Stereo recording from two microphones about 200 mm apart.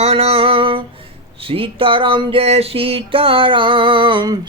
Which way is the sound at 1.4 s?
25° right (ahead or behind).